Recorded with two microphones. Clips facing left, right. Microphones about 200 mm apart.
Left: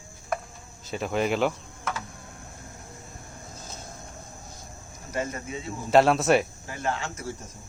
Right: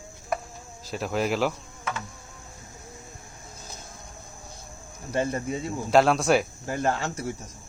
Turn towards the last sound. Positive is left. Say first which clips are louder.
# right 4 dB
turn(degrees=-35)  # may be behind; listen again after turning